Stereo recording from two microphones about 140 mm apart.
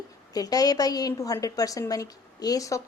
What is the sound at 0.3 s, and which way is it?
A woman's voice, 25° left (ahead or behind).